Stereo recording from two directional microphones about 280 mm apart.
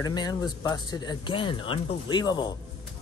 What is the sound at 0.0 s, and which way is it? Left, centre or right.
Speech, centre.